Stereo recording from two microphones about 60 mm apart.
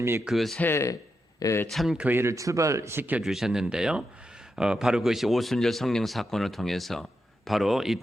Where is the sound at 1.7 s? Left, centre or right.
Centre.